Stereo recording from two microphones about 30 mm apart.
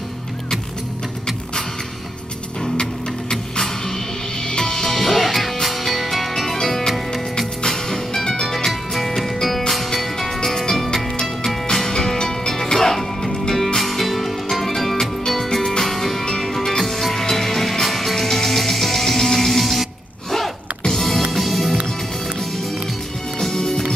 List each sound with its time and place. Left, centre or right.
2.8 s music: left
4.9 s music: centre
8.6 s music: centre
13.7 s music: centre
15.0 s music: centre
20.9 s music: centre
23.4 s music: left